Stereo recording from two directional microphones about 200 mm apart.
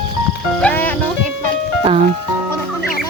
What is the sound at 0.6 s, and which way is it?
Music, 5° left (ahead or behind).